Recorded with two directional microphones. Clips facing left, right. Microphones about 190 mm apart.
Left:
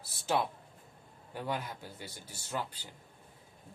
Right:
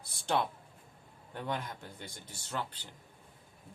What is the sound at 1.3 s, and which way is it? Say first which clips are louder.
Speech: left 1 dB; 10° left (ahead or behind).